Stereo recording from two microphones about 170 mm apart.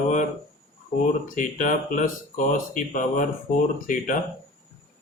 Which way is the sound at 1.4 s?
50° left (ahead or behind).